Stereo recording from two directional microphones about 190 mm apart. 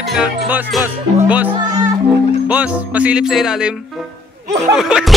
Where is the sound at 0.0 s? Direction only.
5° right (ahead or behind).